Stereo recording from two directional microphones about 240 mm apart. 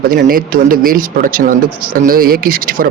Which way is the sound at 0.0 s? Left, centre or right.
Right.